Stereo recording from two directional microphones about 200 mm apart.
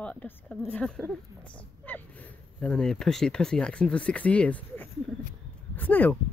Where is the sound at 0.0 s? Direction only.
5° left (ahead or behind).